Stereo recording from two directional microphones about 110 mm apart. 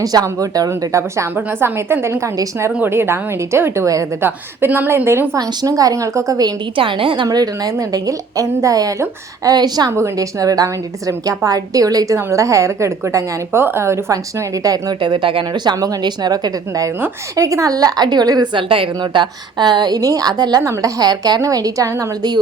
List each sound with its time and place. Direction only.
0.0 s a woman's voice: 35° right (ahead or behind)
5.4 s a woman's voice: 35° right (ahead or behind)
6.7 s a woman's voice: 50° right (ahead or behind)
7.3 s a woman's voice: 35° right (ahead or behind)
15.1 s a woman's voice: 50° right (ahead or behind)
18.7 s a woman's voice: 50° right (ahead or behind); by 22.4 s 35° right (ahead or behind)